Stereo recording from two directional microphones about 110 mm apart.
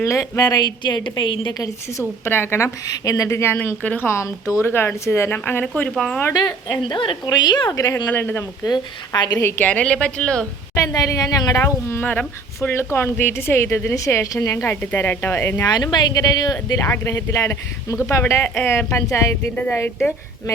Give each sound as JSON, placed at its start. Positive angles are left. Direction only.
{"t": 0.0, "sound": "a woman's voice", "side_deg": 30}
{"t": 1.5, "sound": "a woman's voice", "side_deg": 30}
{"t": 5.9, "sound": "a woman's voice", "side_deg": 5}
{"t": 6.3, "sound": "a woman's voice", "side_deg": 40}
{"t": 7.8, "sound": "a woman's voice", "side_deg": 30}
{"t": 8.1, "sound": "a woman's voice", "side_deg": 20}
{"t": 8.6, "sound": "a woman's voice", "side_deg": 40}
{"t": 9.4, "sound": "a woman's voice", "side_deg": 20}
{"t": 10.8, "sound": "a woman's voice", "side_deg": 35}
{"t": 11.6, "sound": "a woman's voice", "side_deg": 20}
{"t": 15.6, "sound": "a woman's voice", "side_deg": 40}